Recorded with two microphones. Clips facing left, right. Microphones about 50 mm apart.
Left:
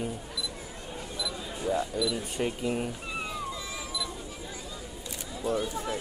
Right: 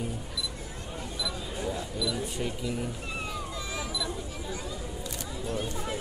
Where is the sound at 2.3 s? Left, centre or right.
Left.